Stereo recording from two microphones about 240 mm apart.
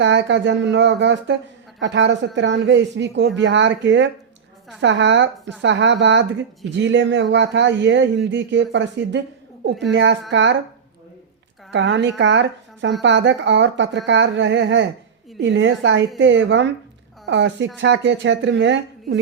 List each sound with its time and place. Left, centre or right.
0.0 s speech: right
11.7 s speech: right